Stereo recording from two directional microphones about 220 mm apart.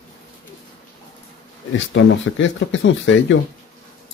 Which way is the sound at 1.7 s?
55° left (ahead or behind).